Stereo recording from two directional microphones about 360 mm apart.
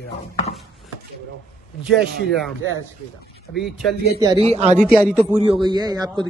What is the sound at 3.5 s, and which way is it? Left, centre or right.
Speech, centre.